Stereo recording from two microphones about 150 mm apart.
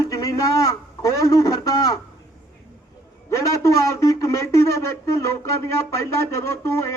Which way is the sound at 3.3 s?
20° left (ahead or behind).